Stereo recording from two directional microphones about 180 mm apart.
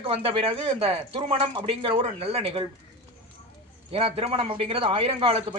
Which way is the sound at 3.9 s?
35° right (ahead or behind).